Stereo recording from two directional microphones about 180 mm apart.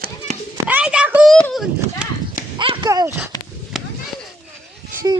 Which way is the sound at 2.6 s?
25° right (ahead or behind).